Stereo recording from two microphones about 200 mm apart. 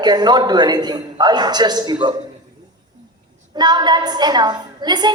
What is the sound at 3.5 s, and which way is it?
A woman's voice, 20° right (ahead or behind).